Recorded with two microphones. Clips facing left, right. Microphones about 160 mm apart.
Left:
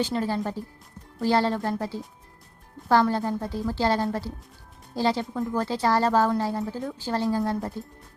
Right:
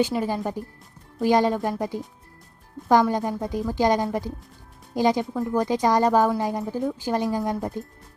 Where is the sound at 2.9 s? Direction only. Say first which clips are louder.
Right 2 dB; 15° right (ahead or behind).